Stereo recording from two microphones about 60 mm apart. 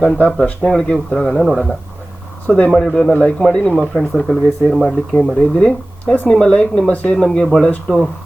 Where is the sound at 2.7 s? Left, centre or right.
Centre.